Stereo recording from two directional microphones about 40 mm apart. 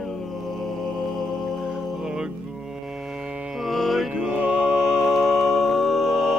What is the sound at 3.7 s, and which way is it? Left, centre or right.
Music, centre.